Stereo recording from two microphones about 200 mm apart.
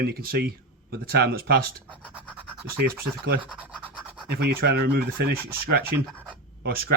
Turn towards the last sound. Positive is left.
turn(degrees=-50)  # may be behind; listen again after turning